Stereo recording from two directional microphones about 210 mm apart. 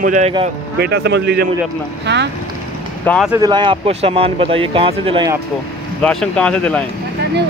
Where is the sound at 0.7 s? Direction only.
50° right (ahead or behind).